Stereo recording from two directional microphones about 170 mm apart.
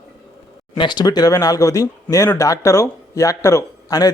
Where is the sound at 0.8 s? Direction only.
25° left (ahead or behind).